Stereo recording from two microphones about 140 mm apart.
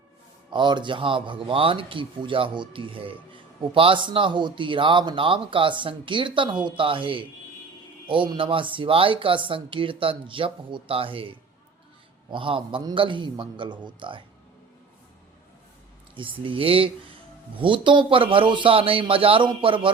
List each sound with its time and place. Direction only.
0.5 s speech: 35° right (ahead or behind)
16.1 s speech: 40° right (ahead or behind)